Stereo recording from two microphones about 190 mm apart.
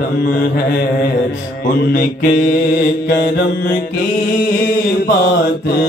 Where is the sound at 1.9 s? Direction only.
45° left (ahead or behind).